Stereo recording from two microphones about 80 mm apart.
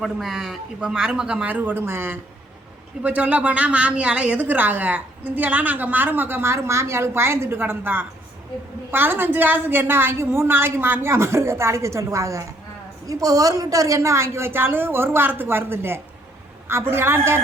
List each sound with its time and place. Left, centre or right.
0.0 s speech: centre; by 2.1 s right
3.0 s a woman's voice: centre